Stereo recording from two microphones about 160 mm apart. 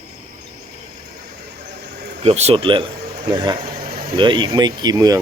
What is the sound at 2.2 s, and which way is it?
Speech, 40° right (ahead or behind).